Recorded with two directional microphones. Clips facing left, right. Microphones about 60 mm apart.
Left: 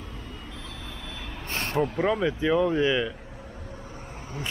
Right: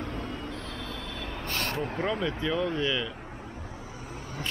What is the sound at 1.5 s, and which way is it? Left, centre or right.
Speech, left.